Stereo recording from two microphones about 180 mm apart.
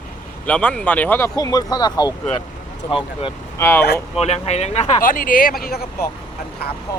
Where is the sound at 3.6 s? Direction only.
10° left (ahead or behind).